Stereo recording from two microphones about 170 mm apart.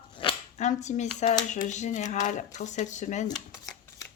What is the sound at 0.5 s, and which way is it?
Speech, 45° left (ahead or behind).